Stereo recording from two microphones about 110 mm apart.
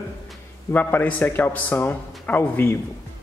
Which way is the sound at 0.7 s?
20° left (ahead or behind).